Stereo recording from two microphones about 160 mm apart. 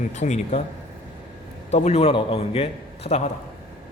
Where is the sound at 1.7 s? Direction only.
45° left (ahead or behind).